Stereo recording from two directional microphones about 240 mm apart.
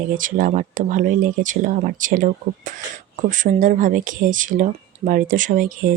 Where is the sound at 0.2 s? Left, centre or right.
Right.